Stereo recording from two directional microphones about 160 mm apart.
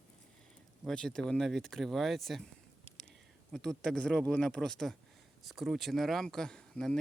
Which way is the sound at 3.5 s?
5° left (ahead or behind).